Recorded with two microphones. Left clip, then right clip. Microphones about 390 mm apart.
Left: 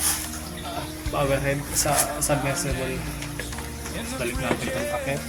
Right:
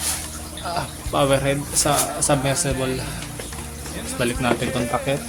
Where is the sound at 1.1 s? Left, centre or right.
Left.